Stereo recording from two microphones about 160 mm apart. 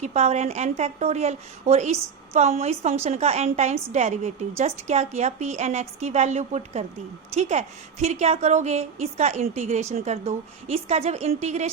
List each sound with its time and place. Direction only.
0.0 s a woman's voice: 45° right (ahead or behind)